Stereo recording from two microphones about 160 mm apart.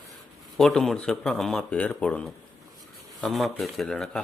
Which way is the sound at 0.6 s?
Centre (ahead or behind).